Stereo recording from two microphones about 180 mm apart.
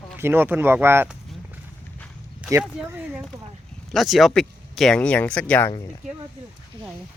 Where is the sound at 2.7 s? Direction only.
10° right (ahead or behind); by 5.7 s 10° left (ahead or behind).